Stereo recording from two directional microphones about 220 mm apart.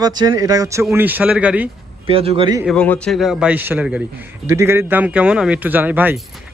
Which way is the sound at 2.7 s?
5° left (ahead or behind).